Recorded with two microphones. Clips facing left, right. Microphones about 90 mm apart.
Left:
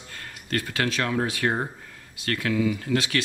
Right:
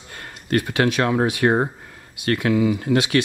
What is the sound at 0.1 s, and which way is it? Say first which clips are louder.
Speech: right 7 dB; 20° right (ahead or behind).